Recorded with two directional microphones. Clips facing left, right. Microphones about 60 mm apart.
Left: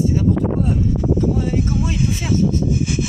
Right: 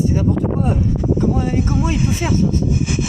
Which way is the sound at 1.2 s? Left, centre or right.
Right.